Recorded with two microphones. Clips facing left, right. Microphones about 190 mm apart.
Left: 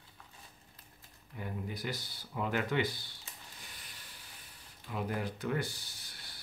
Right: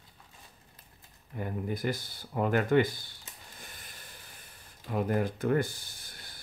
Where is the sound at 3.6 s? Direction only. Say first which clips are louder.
Right 4 dB; 50° right (ahead or behind).